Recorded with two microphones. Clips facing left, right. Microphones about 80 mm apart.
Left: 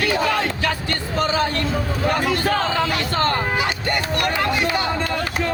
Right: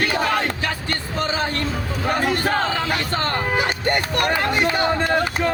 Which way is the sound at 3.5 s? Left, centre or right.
Right.